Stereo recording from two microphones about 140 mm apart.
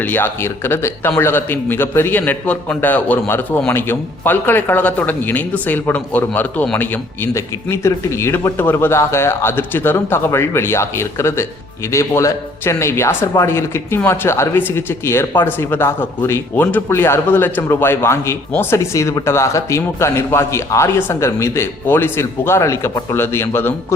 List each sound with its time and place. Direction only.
0.0 s speech: 15° left (ahead or behind)